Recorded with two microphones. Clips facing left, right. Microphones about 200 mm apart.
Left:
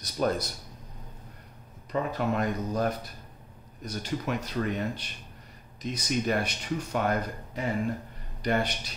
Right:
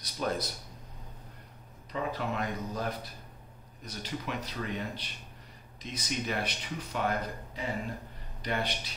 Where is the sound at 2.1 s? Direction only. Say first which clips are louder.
Left 6 dB; 45° left (ahead or behind).